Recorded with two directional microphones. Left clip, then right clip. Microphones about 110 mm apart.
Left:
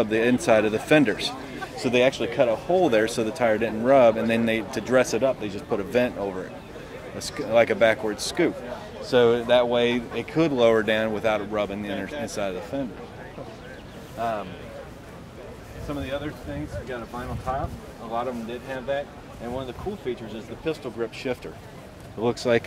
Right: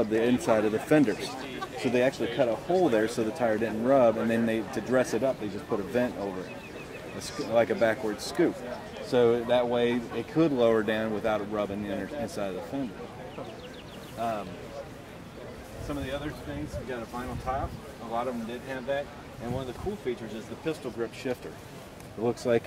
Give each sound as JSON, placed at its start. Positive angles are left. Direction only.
{"t": 0.0, "sound": "speech", "side_deg": 10}
{"t": 3.4, "sound": "speech", "side_deg": 20}
{"t": 7.2, "sound": "speech", "side_deg": 10}
{"t": 14.2, "sound": "speech", "side_deg": 0}
{"t": 15.9, "sound": "speech", "side_deg": 0}